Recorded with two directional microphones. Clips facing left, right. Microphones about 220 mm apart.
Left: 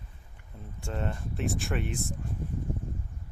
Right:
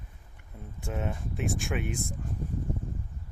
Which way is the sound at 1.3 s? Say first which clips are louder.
Left 1 dB; centre (ahead or behind).